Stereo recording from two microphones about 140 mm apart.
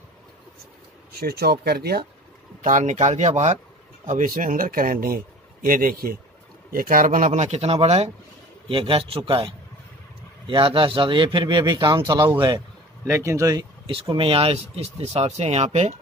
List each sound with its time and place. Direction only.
1.2 s speech: 90° right
2.6 s speech: 65° right (ahead or behind)
4.0 s speech: 70° right (ahead or behind); by 12.6 s 30° right (ahead or behind)
13.0 s speech: 20° right (ahead or behind)
13.8 s speech: 40° right (ahead or behind)